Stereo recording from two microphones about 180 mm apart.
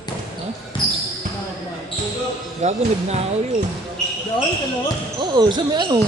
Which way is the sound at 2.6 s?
40° right (ahead or behind).